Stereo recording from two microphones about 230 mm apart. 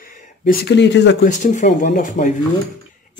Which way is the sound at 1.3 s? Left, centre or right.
Left.